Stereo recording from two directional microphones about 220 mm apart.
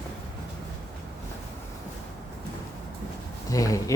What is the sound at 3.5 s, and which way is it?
Speech, 15° left (ahead or behind).